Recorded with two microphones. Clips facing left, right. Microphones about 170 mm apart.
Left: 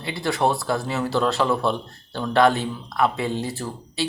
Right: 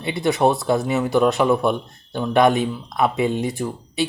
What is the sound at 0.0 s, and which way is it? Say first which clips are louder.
Speech: right 4 dB; 20° right (ahead or behind).